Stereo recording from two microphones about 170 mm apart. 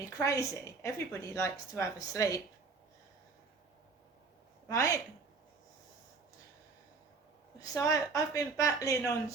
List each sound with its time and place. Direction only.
0.0 s a woman's voice: 20° left (ahead or behind)
4.7 s a woman's voice: 20° left (ahead or behind)
7.6 s a woman's voice: 20° left (ahead or behind)